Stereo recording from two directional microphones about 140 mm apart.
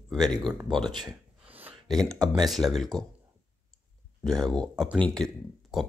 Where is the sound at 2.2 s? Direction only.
30° right (ahead or behind).